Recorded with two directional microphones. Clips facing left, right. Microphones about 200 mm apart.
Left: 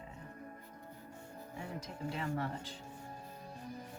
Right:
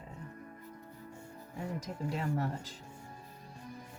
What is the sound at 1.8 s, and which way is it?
Speech, 40° right (ahead or behind).